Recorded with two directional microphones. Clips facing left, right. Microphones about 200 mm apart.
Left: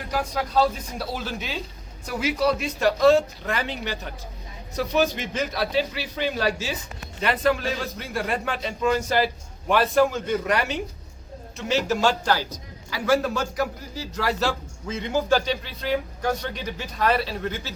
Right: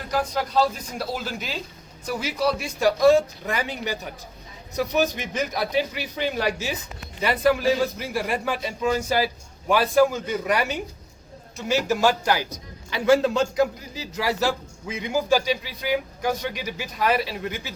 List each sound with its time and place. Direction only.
0.2 s a man's voice: centre (ahead or behind)